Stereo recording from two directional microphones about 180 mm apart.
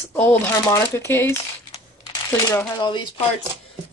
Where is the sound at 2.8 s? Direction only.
25° left (ahead or behind).